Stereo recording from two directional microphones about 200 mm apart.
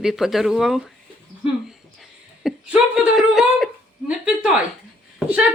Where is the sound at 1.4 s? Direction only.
Centre (ahead or behind).